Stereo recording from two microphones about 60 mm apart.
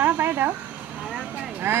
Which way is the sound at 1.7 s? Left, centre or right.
Right.